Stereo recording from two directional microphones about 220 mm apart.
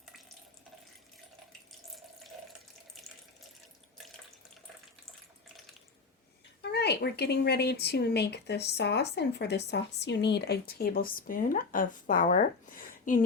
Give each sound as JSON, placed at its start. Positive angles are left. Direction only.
{"t": 6.6, "sound": "speech", "side_deg": 50}